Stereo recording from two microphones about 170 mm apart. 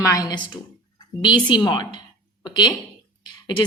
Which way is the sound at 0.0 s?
20° left (ahead or behind).